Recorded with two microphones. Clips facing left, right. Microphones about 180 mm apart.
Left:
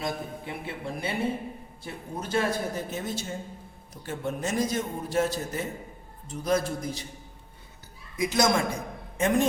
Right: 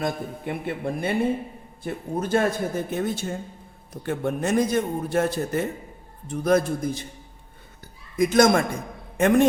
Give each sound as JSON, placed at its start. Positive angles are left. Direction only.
{"t": 0.0, "sound": "a man's voice", "side_deg": -55}
{"t": 8.1, "sound": "a man's voice", "side_deg": -50}